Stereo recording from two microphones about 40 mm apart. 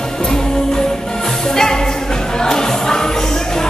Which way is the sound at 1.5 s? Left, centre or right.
Centre.